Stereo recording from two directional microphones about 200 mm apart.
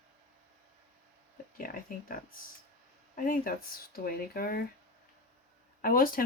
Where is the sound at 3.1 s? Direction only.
45° left (ahead or behind).